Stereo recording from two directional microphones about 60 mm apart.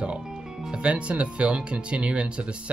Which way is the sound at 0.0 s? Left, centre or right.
Centre.